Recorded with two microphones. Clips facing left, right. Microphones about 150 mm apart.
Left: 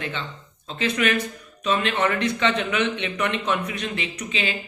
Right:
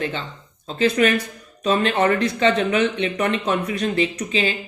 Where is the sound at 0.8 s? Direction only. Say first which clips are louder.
Right 5 dB; 35° right (ahead or behind).